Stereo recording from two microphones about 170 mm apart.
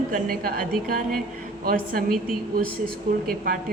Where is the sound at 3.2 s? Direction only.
55° right (ahead or behind).